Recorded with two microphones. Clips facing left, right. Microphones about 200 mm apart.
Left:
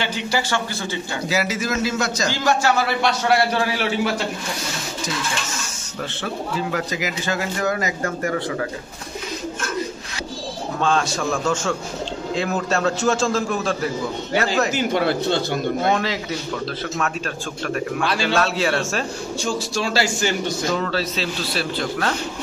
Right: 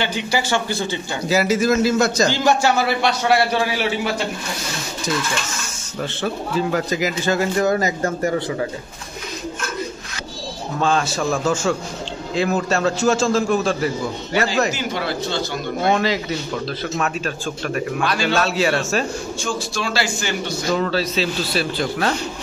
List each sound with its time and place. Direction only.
1.3 s a man's voice: 45° right (ahead or behind)
2.2 s a man's voice: 20° right (ahead or behind)
6.7 s speech: 40° right (ahead or behind)
10.8 s a man's voice: 5° right (ahead or behind)
14.7 s speech: 55° left (ahead or behind)
15.9 s a man's voice: centre (ahead or behind)
18.0 s a man's voice: 30° left (ahead or behind)
18.3 s a man's voice: 5° right (ahead or behind)
19.4 s a man's voice: 40° left (ahead or behind)
20.7 s a man's voice: 5° right (ahead or behind)